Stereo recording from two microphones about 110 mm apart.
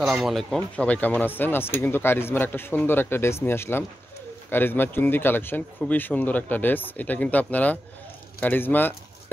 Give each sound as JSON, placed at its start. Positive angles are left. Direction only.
{"t": 0.0, "sound": "speech", "side_deg": 0}